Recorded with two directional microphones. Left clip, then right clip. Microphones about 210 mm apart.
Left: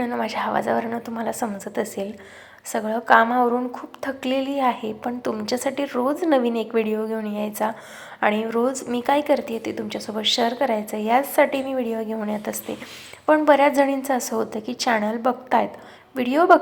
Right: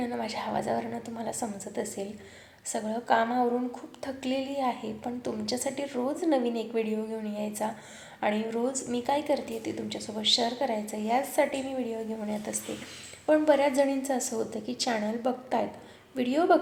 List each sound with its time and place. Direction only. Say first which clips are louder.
0.0 s a woman's voice: left 8 dB; 10° left (ahead or behind)